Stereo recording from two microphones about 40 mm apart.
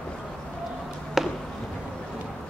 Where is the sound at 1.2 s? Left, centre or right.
Centre.